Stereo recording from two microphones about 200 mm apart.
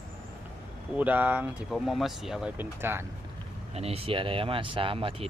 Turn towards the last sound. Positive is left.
turn(degrees=-30)  # may be behind; listen again after turning